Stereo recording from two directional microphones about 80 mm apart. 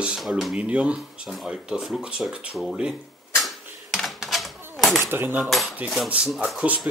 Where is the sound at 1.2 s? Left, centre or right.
Centre.